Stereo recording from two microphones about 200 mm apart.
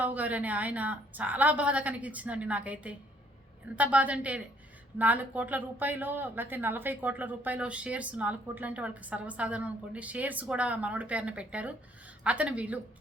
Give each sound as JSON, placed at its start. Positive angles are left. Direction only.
{"t": 0.0, "sound": "speech", "side_deg": -10}